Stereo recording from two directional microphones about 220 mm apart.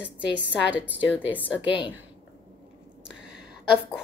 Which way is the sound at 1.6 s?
25° left (ahead or behind).